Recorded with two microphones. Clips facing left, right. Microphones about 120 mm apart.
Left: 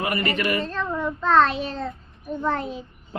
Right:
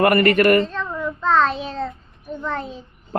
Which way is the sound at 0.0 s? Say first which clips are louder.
Right 10 dB; 60° right (ahead or behind).